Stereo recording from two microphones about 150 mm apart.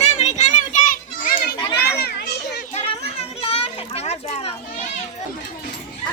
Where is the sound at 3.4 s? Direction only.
40° left (ahead or behind).